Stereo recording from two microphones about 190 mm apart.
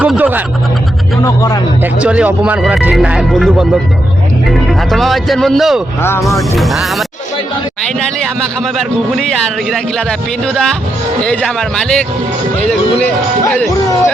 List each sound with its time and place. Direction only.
0.0 s speech: 10° right (ahead or behind)
1.2 s a man's voice: 15° left (ahead or behind)
1.8 s speech: 5° right (ahead or behind)
4.8 s speech: centre (ahead or behind)
6.0 s a man's voice: 10° left (ahead or behind)
6.6 s speech: centre (ahead or behind)